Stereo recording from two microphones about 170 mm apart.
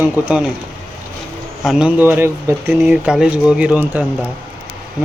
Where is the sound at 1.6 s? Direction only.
5° right (ahead or behind).